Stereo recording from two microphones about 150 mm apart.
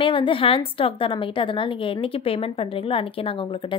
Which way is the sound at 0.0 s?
35° left (ahead or behind).